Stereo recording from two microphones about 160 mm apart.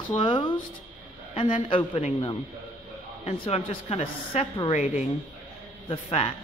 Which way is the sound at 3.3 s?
40° left (ahead or behind).